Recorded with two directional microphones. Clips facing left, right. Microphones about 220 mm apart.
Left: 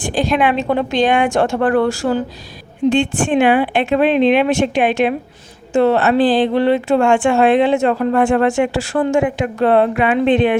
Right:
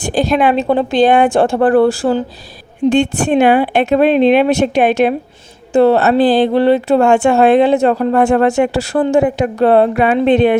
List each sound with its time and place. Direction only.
0.0 s a woman's voice: 40° right (ahead or behind)